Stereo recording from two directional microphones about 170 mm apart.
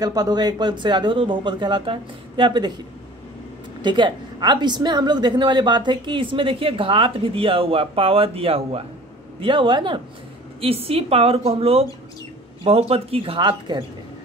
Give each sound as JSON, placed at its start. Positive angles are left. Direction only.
{"t": 0.0, "sound": "speech", "side_deg": -20}
{"t": 3.8, "sound": "speech", "side_deg": -25}